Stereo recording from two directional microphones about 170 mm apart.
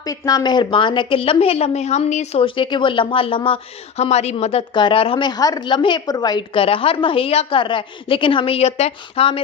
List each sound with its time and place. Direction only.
0.0 s a woman's voice: 20° left (ahead or behind); by 4.6 s 40° left (ahead or behind)
4.7 s a woman's voice: 30° left (ahead or behind)